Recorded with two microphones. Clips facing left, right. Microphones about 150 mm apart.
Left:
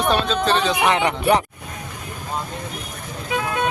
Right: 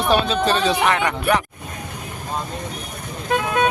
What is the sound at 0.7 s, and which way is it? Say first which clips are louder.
Speech: left 1 dB; 15° left (ahead or behind).